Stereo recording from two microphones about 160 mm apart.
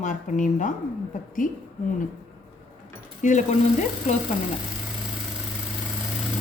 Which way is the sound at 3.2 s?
50° left (ahead or behind).